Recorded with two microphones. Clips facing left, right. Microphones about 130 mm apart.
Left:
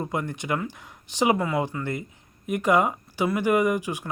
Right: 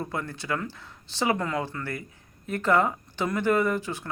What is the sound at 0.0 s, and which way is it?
Speech, 15° left (ahead or behind).